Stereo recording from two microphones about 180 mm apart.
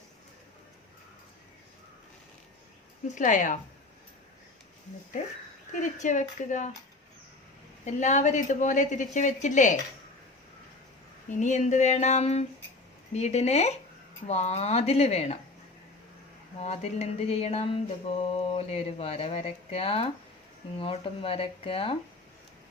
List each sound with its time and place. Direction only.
3.2 s a woman's voice: 45° left (ahead or behind)
5.8 s a woman's voice: 45° left (ahead or behind)
7.9 s a woman's voice: 40° left (ahead or behind)
11.3 s speech: 40° left (ahead or behind)
16.6 s speech: 35° left (ahead or behind)